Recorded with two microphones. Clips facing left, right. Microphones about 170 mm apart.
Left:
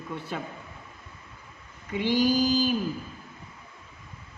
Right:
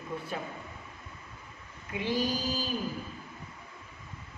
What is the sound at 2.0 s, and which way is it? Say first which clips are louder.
Speech: left 8 dB; 80° left.